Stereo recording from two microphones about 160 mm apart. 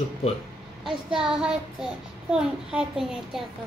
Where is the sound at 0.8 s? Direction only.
5° right (ahead or behind).